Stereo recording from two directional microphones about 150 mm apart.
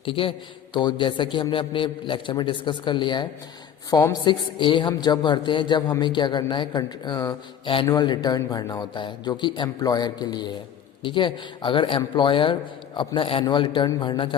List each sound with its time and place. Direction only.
0.0 s a woman's voice: 35° left (ahead or behind)